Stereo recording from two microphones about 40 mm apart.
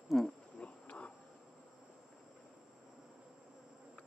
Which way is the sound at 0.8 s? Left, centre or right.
Left.